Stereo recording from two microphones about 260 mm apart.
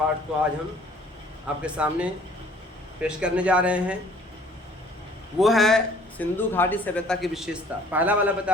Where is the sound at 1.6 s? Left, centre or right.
Centre.